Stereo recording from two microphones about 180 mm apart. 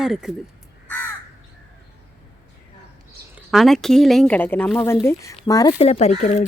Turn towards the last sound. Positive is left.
turn(degrees=40)  # may be behind; listen again after turning